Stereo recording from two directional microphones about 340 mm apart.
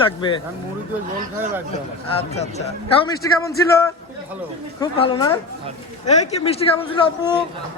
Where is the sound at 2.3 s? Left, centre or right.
Centre.